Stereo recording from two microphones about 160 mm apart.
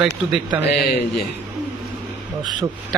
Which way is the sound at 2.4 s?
30° right (ahead or behind).